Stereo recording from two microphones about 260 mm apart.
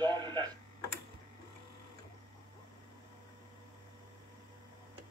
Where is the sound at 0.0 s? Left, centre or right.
Centre.